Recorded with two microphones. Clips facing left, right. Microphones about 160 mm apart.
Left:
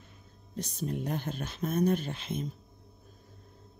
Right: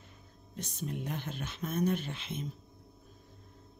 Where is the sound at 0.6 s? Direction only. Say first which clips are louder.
Left 4 dB; 35° left (ahead or behind).